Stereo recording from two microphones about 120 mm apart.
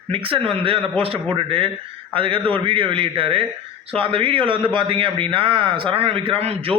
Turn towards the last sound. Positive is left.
turn(degrees=-55)  # may be behind; listen again after turning